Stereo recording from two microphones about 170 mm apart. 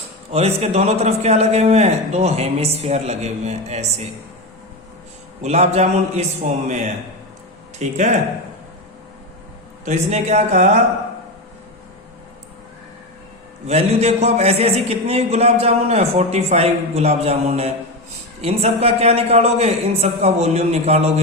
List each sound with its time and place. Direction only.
0.3 s a man's voice: 35° right (ahead or behind)
5.4 s a man's voice: 40° right (ahead or behind)
7.8 s speech: 45° right (ahead or behind)
9.8 s speech: 45° right (ahead or behind)
13.7 s a man's voice: 40° right (ahead or behind)